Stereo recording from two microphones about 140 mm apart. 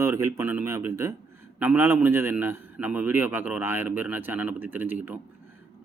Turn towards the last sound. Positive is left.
turn(degrees=-15)  # may be behind; listen again after turning